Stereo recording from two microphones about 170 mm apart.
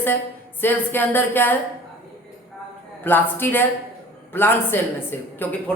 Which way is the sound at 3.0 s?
10° left (ahead or behind).